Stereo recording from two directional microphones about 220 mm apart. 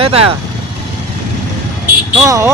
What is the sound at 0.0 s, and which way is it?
Speech, 25° right (ahead or behind).